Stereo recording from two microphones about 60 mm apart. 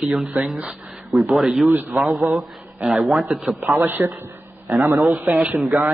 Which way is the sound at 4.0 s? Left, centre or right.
Right.